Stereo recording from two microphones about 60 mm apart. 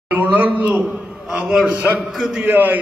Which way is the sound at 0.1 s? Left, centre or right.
Right.